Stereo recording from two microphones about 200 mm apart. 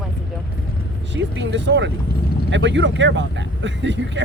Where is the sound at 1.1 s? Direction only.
65° right (ahead or behind).